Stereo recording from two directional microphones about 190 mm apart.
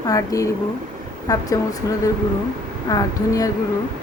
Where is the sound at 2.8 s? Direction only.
20° left (ahead or behind).